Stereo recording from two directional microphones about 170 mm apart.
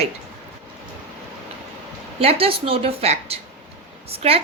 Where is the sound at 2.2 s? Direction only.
35° right (ahead or behind).